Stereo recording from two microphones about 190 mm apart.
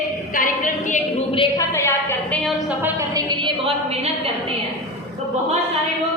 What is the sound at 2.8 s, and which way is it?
A woman's voice, 15° right (ahead or behind).